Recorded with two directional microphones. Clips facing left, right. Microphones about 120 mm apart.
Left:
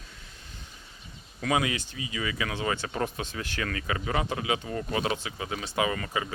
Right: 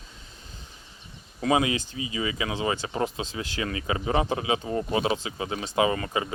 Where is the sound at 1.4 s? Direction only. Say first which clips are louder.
Right 4 dB; 25° right (ahead or behind).